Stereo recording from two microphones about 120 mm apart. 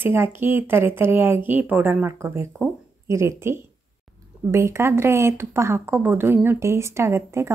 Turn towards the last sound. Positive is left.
turn(degrees=-25)  # may be behind; listen again after turning